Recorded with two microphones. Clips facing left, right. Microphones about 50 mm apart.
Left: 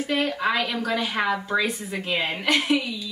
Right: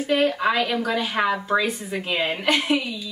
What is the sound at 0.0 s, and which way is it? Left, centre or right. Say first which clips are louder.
Speech: right 4 dB; centre.